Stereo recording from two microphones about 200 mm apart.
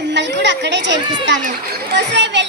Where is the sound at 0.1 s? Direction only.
60° right (ahead or behind).